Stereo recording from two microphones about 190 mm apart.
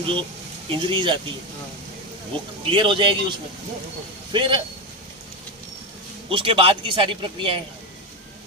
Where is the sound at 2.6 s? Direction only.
25° right (ahead or behind).